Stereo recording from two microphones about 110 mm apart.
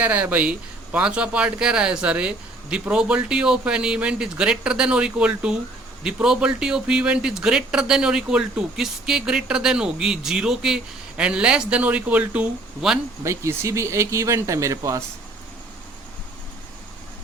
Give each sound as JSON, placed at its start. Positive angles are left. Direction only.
{"t": 0.0, "sound": "speech", "side_deg": -15}
{"t": 13.2, "sound": "speech", "side_deg": -25}